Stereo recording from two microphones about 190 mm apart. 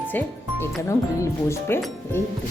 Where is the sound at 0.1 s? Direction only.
10° left (ahead or behind).